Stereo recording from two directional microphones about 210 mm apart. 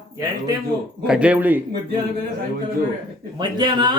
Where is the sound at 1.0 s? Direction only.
5° right (ahead or behind).